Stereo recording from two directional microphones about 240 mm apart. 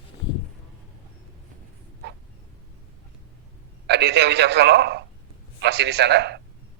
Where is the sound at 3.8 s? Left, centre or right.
Right.